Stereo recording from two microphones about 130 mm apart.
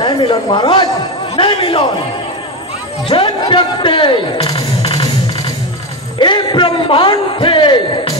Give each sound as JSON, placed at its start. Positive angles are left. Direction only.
{"t": 0.0, "sound": "a man's voice", "side_deg": 40}
{"t": 3.1, "sound": "a man's voice", "side_deg": 40}
{"t": 4.6, "sound": "music", "side_deg": 50}
{"t": 6.1, "sound": "a man's voice", "side_deg": 35}